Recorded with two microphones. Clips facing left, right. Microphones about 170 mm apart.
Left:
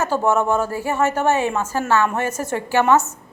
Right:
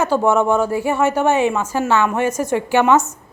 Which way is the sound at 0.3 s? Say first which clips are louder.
Right 2 dB; 15° right (ahead or behind).